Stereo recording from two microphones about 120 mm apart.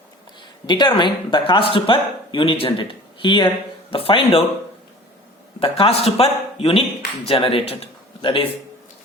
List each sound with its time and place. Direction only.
0.7 s speech: 40° left (ahead or behind)
5.5 s speech: 50° left (ahead or behind)